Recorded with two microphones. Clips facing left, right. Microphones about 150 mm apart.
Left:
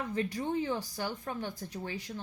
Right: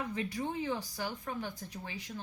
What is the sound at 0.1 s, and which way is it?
Speech, 45° left (ahead or behind).